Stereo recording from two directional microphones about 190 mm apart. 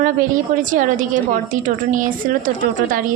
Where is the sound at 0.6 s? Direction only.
45° right (ahead or behind).